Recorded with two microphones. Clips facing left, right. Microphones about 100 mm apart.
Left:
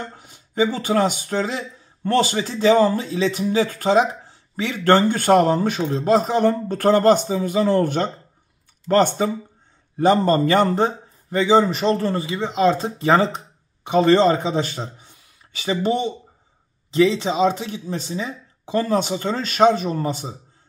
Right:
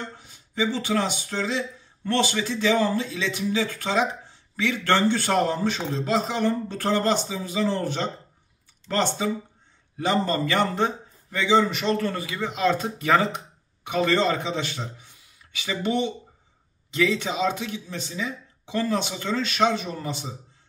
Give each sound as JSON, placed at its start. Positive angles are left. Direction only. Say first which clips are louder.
{"t": 0.0, "sound": "a man's voice", "louder": "left 3 dB", "side_deg": 45}